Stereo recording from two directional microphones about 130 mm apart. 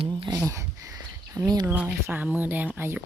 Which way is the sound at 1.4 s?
30° right (ahead or behind).